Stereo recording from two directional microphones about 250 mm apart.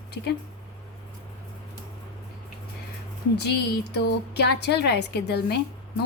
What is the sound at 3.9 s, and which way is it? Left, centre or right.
A woman's voice, left.